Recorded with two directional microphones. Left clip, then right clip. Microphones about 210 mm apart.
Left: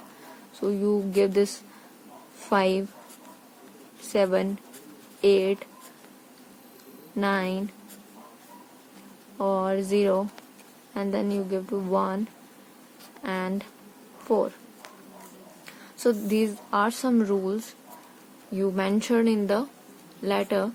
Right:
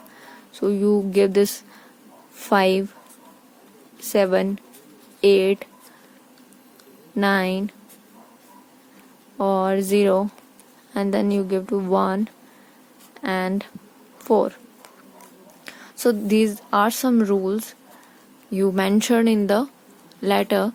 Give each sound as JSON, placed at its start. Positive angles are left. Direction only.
{"t": 0.5, "sound": "a woman's voice", "side_deg": -40}
{"t": 4.1, "sound": "a woman's voice", "side_deg": -40}
{"t": 7.2, "sound": "a woman's voice", "side_deg": -40}
{"t": 9.4, "sound": "a woman's voice", "side_deg": -40}
{"t": 13.2, "sound": "a woman's voice", "side_deg": -40}
{"t": 15.6, "sound": "speech", "side_deg": -40}